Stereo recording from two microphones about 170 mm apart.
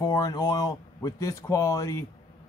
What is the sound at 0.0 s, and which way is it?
A man's voice, 20° left (ahead or behind).